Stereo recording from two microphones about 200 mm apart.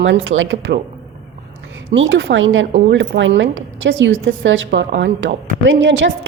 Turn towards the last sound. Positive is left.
turn(degrees=-65)  # may be behind; listen again after turning